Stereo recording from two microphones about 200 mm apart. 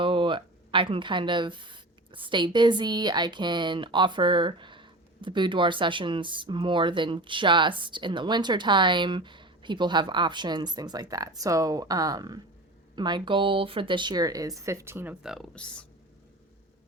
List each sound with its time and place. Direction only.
0.0 s speech: 25° right (ahead or behind); by 15.9 s 5° left (ahead or behind)